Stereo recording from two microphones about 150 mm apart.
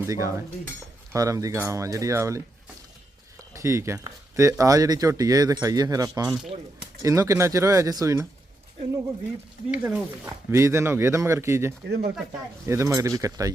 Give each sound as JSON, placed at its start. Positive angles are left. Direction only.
{"t": 0.0, "sound": "speech", "side_deg": -20}
{"t": 3.5, "sound": "speech", "side_deg": -20}
{"t": 9.7, "sound": "speech", "side_deg": -10}
{"t": 11.9, "sound": "speech", "side_deg": -90}
{"t": 12.6, "sound": "speech", "side_deg": -20}